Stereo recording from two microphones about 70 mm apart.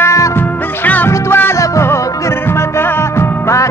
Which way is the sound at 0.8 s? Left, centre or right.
Left.